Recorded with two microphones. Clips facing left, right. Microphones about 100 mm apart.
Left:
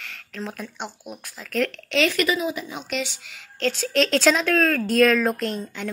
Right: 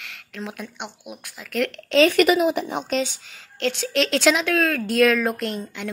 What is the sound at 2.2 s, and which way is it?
Speech, 65° right (ahead or behind).